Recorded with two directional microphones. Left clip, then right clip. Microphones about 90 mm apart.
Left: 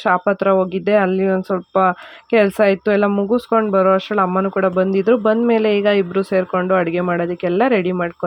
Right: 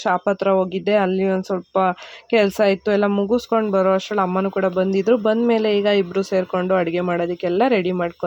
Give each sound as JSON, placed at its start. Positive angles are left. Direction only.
{"t": 0.0, "sound": "speech", "side_deg": 25}